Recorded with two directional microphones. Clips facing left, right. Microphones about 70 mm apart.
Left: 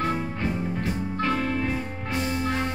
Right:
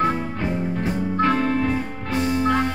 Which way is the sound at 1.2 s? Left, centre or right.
Right.